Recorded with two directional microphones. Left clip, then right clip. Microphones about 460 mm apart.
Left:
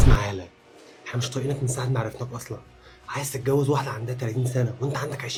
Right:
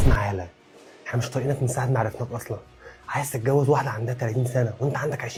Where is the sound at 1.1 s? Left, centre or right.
Centre.